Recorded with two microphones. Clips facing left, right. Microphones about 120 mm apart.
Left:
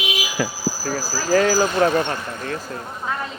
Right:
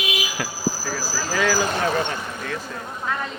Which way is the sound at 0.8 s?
45° left (ahead or behind).